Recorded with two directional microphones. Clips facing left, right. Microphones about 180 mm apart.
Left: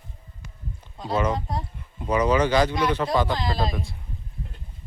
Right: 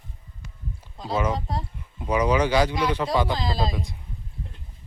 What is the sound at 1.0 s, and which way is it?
Speech, centre (ahead or behind).